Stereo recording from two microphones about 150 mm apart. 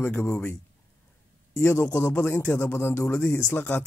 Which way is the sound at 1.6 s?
15° left (ahead or behind).